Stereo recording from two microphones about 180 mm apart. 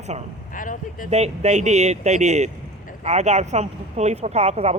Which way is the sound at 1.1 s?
40° right (ahead or behind).